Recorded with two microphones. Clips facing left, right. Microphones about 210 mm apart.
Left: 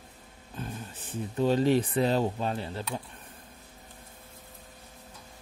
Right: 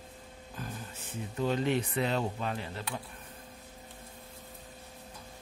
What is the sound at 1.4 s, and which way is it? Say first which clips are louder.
Speech: left 6 dB; 35° left (ahead or behind).